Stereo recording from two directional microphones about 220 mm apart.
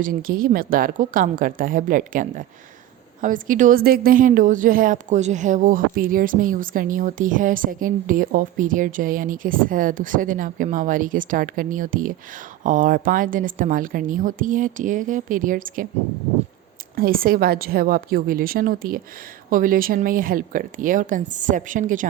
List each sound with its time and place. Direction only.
0.0 s a woman's voice: 40° right (ahead or behind)
16.9 s a woman's voice: 40° right (ahead or behind)